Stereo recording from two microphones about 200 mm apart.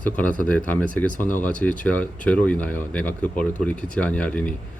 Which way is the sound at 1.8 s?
5° left (ahead or behind).